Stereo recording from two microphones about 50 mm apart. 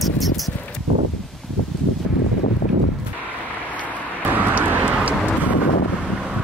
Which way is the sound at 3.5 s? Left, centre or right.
Left.